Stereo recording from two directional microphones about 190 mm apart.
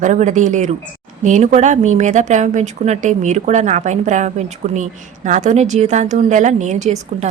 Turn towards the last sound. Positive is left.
turn(degrees=-35)  # may be behind; listen again after turning